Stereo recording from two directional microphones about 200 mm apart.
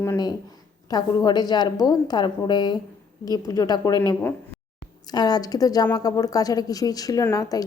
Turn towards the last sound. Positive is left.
turn(degrees=15)  # may be behind; listen again after turning